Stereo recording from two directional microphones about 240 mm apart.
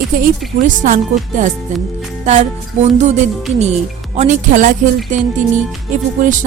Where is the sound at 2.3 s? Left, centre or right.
Right.